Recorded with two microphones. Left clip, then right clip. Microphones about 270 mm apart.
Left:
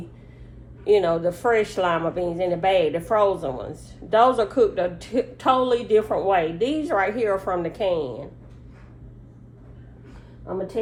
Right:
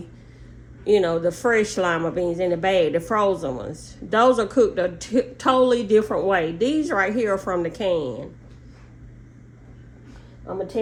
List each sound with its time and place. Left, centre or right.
0.9 s speech: right
10.5 s speech: right